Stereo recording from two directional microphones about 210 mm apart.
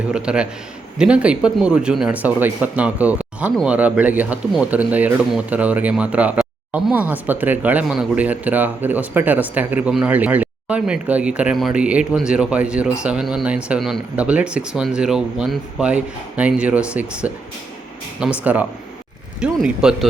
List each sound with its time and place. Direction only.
0.1 s speech: 5° right (ahead or behind)